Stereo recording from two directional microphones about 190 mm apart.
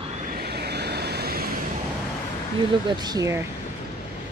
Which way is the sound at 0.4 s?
55° right (ahead or behind).